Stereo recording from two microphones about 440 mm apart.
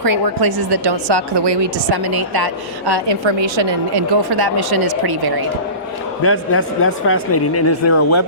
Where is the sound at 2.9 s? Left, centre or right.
Right.